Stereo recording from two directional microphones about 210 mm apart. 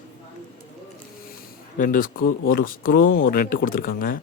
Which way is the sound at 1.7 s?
40° left (ahead or behind).